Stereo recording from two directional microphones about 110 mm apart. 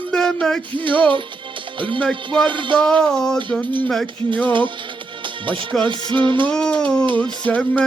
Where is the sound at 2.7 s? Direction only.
10° left (ahead or behind).